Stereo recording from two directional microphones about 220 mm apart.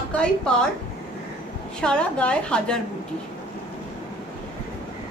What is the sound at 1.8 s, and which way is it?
A woman's voice, 5° left (ahead or behind).